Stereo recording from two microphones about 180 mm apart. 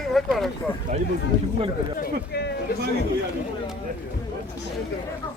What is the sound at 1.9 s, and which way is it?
Speech, 60° left (ahead or behind).